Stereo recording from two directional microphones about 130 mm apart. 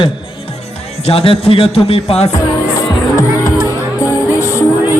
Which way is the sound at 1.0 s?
50° left (ahead or behind).